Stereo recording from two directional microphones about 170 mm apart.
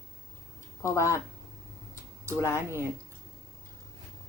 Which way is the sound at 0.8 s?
15° left (ahead or behind).